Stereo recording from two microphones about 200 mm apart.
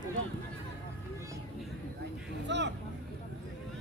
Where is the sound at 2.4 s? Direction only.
60° right (ahead or behind).